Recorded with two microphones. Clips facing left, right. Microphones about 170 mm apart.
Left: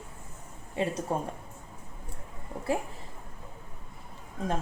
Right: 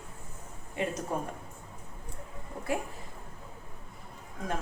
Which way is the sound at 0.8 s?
30° left (ahead or behind).